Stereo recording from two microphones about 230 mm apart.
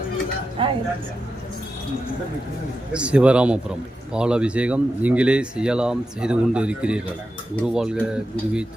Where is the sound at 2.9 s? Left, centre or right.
Centre.